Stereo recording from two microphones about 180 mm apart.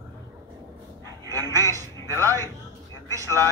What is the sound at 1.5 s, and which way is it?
Speech, 15° left (ahead or behind).